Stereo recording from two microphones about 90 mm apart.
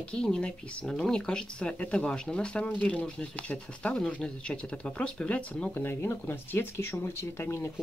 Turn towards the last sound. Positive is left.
turn(degrees=30)  # may be behind; listen again after turning